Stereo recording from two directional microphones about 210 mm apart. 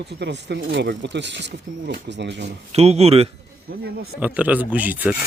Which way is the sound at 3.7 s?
50° right (ahead or behind).